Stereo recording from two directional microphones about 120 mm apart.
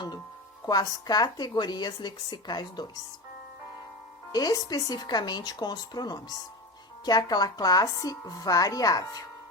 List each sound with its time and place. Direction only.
0.6 s a woman's voice: 30° left (ahead or behind)
4.3 s a woman's voice: 30° left (ahead or behind)